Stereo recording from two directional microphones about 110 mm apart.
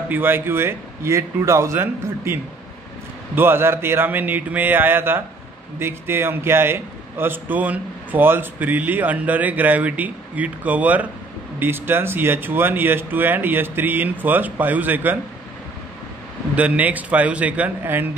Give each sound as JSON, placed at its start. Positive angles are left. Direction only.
{"t": 0.1, "sound": "a man's voice", "side_deg": -20}
{"t": 3.3, "sound": "a man's voice", "side_deg": -20}
{"t": 16.5, "sound": "a man's voice", "side_deg": -15}